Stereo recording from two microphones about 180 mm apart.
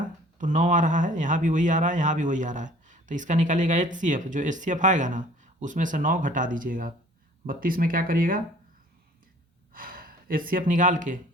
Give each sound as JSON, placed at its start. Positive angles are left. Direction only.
{"t": 0.3, "sound": "speech", "side_deg": -45}
{"t": 9.7, "sound": "speech", "side_deg": -50}